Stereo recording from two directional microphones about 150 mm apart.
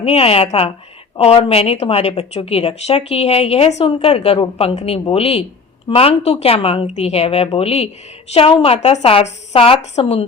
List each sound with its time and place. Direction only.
0.0 s a woman's voice: 40° left (ahead or behind)